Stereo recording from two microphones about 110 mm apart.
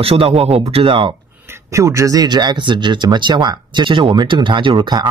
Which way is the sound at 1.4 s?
25° right (ahead or behind).